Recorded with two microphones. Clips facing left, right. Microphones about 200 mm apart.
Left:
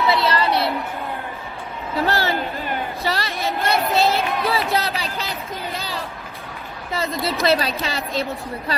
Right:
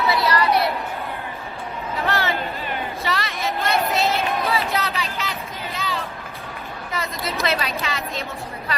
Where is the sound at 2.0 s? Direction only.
35° left (ahead or behind).